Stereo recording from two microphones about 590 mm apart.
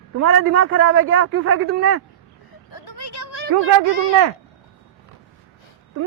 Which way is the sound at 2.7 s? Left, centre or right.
Left.